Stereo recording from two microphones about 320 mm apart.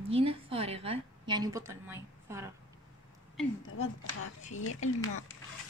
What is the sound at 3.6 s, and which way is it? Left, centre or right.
Speech, left.